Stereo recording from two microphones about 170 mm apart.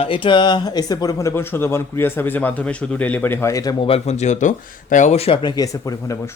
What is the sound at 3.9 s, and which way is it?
Speech, 40° left (ahead or behind).